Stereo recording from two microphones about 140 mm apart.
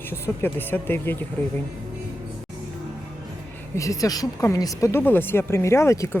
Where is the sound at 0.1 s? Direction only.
15° left (ahead or behind).